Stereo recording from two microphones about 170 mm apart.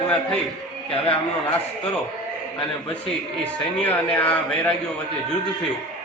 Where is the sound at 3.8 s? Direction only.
10° left (ahead or behind).